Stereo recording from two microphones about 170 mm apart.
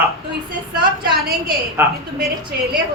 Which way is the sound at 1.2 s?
65° right (ahead or behind).